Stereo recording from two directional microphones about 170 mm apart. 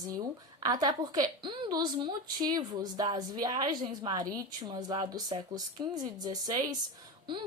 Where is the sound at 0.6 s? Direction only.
25° right (ahead or behind).